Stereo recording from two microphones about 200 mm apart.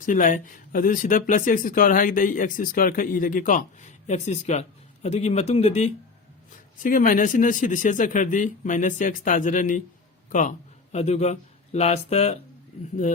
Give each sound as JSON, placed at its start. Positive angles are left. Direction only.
{"t": 0.0, "sound": "speech", "side_deg": 40}
{"t": 6.8, "sound": "speech", "side_deg": 40}
{"t": 10.9, "sound": "speech", "side_deg": 35}